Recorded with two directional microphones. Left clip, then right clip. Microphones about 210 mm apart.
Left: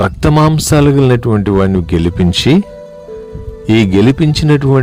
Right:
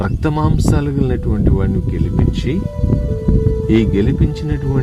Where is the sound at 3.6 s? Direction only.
45° left (ahead or behind).